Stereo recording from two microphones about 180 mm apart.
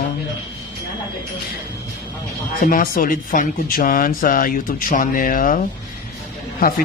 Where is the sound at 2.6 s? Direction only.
50° left (ahead or behind).